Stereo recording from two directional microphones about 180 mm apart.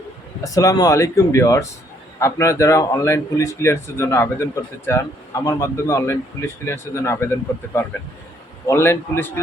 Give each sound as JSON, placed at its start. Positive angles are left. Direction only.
{"t": 0.4, "sound": "speech", "side_deg": 20}